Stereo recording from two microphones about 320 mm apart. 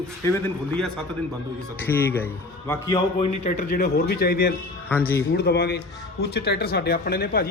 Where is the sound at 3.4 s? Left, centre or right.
Left.